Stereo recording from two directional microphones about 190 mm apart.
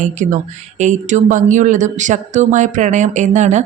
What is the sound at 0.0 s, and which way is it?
Speech, 40° right (ahead or behind).